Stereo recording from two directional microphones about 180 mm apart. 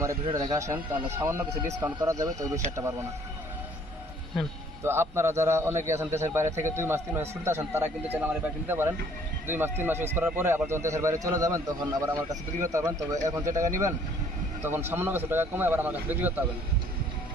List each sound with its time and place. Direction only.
0.3 s speech: 20° right (ahead or behind)
4.8 s speech: 15° right (ahead or behind)
12.3 s speech: 45° right (ahead or behind)
12.7 s speech: 15° right (ahead or behind)